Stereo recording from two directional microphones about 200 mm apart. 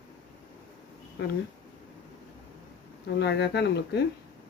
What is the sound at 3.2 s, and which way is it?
Speech, 60° left (ahead or behind).